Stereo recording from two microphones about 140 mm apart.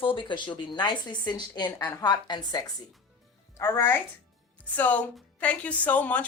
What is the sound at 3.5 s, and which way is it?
A woman's voice, 20° left (ahead or behind).